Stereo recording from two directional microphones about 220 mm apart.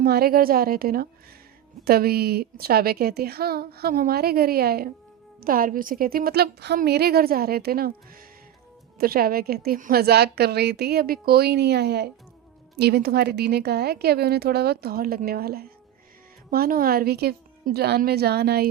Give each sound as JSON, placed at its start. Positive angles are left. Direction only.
{"t": 0.0, "sound": "speech", "side_deg": -45}